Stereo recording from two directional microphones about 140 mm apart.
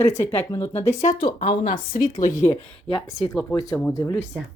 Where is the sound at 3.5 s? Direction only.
25° left (ahead or behind).